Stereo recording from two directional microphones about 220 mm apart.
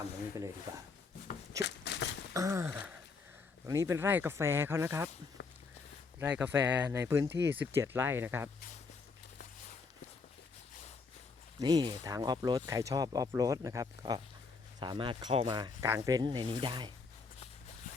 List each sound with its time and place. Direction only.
1.6 s a sound: 50° left (ahead or behind)
2.3 s speech: 15° right (ahead or behind)
6.1 s speech: 10° right (ahead or behind)
11.6 s speech: 20° right (ahead or behind)